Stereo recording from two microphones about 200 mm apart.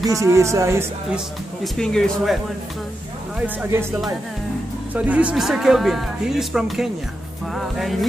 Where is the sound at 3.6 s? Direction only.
10° right (ahead or behind).